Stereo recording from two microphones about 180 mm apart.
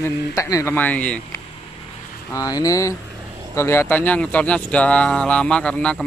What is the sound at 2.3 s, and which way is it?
Speech, 20° left (ahead or behind).